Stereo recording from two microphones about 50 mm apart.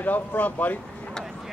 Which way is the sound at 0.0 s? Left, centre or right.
Left.